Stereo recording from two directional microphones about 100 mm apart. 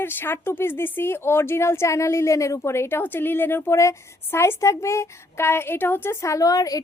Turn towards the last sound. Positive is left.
turn(degrees=35)  # may be behind; listen again after turning